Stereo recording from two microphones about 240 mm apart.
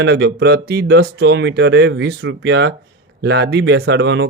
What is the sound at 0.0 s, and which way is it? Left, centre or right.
Speech, right.